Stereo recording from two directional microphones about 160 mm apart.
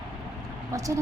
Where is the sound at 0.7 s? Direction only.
20° right (ahead or behind).